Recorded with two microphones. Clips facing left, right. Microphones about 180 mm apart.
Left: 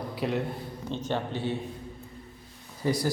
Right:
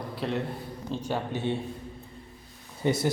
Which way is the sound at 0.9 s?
10° right (ahead or behind).